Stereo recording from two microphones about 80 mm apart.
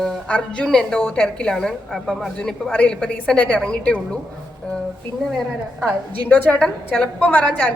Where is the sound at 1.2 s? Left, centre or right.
Centre.